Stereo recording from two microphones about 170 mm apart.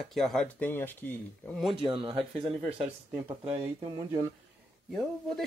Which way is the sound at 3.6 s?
20° right (ahead or behind).